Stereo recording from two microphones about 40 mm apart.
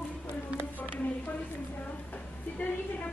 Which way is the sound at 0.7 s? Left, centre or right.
Left.